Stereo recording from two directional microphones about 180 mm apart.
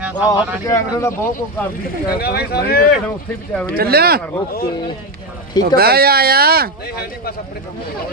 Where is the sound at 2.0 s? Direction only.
60° left (ahead or behind).